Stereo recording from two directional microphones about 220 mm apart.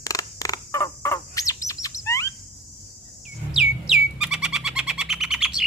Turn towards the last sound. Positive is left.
turn(degrees=0)  # may be behind; listen again after turning